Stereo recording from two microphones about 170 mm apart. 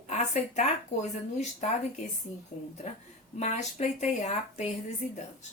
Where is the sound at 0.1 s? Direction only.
45° left (ahead or behind).